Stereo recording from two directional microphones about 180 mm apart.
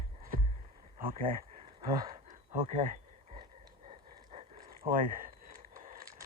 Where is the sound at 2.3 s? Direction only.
45° right (ahead or behind).